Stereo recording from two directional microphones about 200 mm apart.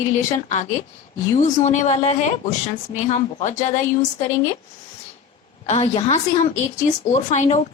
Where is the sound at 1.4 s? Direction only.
35° left (ahead or behind).